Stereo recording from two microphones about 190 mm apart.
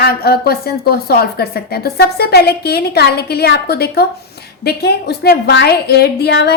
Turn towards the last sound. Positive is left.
turn(degrees=60)  # may be behind; listen again after turning